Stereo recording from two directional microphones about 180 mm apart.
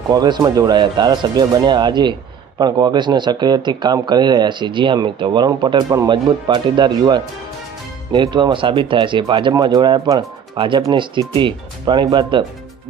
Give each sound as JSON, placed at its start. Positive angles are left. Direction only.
{"t": 0.1, "sound": "speech", "side_deg": -25}